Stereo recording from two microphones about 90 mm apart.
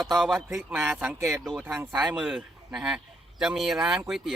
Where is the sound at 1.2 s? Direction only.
35° right (ahead or behind).